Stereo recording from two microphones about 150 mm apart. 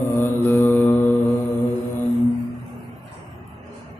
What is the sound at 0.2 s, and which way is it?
Mantra, 15° left (ahead or behind).